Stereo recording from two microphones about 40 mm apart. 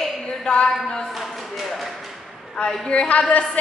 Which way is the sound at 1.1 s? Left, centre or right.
Centre.